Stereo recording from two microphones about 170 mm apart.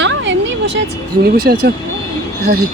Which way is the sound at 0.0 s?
90° right.